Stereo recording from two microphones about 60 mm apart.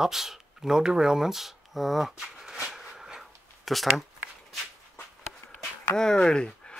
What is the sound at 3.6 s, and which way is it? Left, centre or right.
Speech, centre.